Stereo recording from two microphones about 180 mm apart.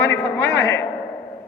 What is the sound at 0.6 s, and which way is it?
Speech, 75° left (ahead or behind).